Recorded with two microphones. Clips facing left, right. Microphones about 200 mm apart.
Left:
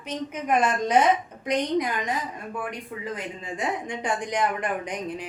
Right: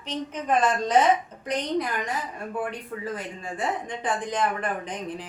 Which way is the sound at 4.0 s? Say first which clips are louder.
Left 1 dB; 15° left (ahead or behind).